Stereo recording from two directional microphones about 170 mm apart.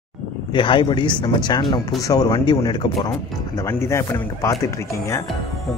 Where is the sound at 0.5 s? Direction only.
30° left (ahead or behind).